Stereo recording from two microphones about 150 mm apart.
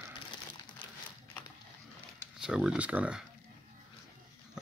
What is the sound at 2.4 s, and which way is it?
Speech, 5° right (ahead or behind).